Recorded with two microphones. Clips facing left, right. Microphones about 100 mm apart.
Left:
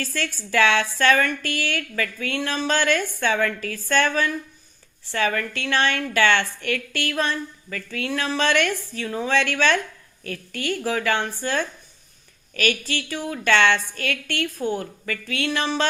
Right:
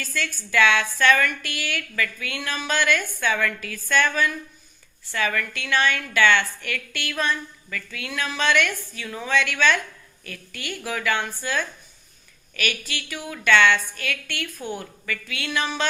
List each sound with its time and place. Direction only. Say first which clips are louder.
0.0 s a woman's voice: left 2 dB; 35° left (ahead or behind)